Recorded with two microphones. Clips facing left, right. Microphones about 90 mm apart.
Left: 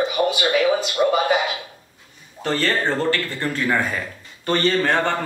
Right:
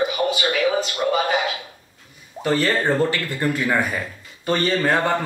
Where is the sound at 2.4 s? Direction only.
10° right (ahead or behind).